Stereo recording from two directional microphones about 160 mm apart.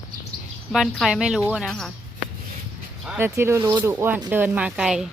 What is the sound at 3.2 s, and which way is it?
Speech, 15° right (ahead or behind).